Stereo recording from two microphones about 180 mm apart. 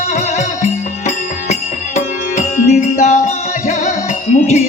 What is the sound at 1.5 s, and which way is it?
Music, 40° left (ahead or behind).